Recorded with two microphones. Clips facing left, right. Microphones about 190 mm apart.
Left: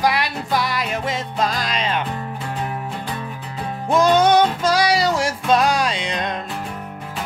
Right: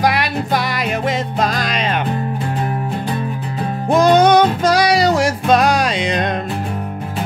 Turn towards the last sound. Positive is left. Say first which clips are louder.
# right 6 dB
turn(degrees=-65)  # may be behind; listen again after turning